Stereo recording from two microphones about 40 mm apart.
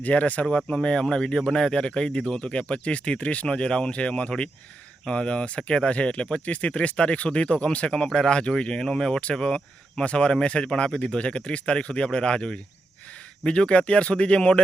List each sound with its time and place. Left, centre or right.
0.0 s speech: left
0.5 s speech: left